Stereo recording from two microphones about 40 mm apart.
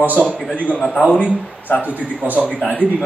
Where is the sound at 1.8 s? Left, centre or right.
Right.